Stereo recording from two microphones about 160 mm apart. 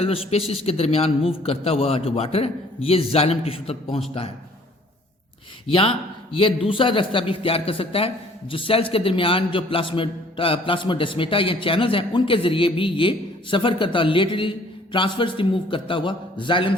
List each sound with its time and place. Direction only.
0.3 s speech: 40° left (ahead or behind)
5.6 s speech: 35° left (ahead or behind)